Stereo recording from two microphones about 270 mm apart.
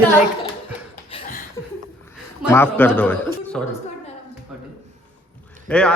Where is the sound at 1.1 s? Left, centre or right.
Centre.